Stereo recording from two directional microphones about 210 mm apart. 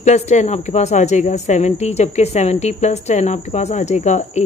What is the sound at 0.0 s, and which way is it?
Speech, 35° left (ahead or behind).